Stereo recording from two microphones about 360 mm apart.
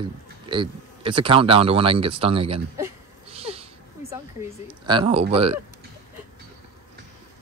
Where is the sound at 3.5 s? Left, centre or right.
Centre.